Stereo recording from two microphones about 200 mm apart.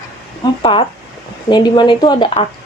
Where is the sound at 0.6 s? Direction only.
25° left (ahead or behind).